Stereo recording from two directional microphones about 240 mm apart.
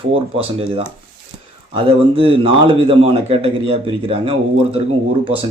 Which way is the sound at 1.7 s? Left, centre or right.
Right.